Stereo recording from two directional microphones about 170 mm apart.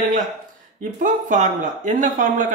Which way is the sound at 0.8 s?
55° right (ahead or behind).